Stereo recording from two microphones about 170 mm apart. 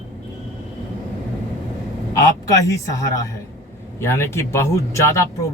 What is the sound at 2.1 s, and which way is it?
Speech, 20° left (ahead or behind).